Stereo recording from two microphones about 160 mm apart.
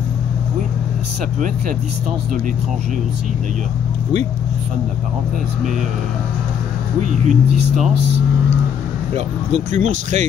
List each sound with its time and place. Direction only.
7.0 s speech: 50° right (ahead or behind)
9.1 s speech: 50° right (ahead or behind)